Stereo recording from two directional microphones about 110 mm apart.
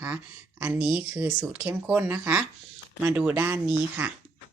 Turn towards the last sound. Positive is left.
turn(degrees=-15)  # may be behind; listen again after turning